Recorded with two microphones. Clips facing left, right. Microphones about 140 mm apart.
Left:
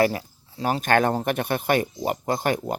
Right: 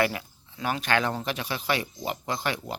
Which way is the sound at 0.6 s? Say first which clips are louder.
Left 6 dB; 45° left (ahead or behind).